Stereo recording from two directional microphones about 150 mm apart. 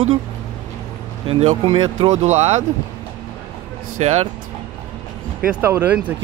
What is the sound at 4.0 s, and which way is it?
Speech, 45° right (ahead or behind).